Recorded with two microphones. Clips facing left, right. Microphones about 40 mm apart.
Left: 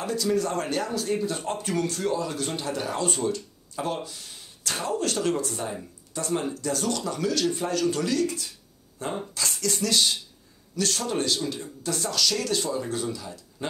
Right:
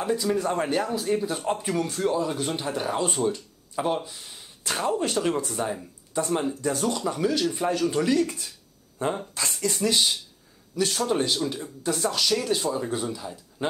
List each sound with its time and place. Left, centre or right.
0.0 s a man's voice: right